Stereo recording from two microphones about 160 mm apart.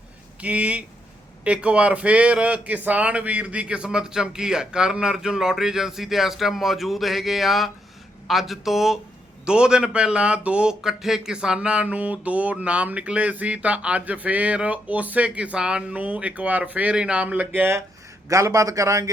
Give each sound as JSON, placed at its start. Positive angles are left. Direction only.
{"t": 0.4, "sound": "a man's voice", "side_deg": -10}